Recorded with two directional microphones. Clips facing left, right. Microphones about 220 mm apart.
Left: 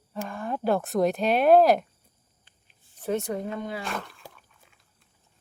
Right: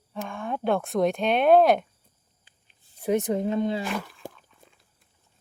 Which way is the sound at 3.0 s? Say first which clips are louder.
Right 4 dB; 15° right (ahead or behind).